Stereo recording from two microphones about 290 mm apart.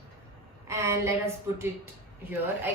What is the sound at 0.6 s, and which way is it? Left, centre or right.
A woman's voice, centre.